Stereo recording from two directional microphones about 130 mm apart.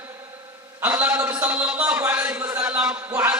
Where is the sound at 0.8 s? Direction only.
15° right (ahead or behind).